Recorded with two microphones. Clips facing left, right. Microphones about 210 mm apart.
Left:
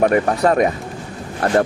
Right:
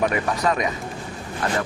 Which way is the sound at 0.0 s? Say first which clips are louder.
Left 7 dB; 50° left (ahead or behind).